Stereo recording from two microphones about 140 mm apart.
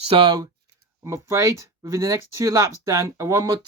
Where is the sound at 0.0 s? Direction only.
40° right (ahead or behind).